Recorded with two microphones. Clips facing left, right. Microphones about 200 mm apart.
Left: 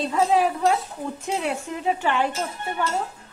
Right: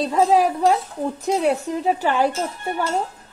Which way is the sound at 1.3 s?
40° right (ahead or behind).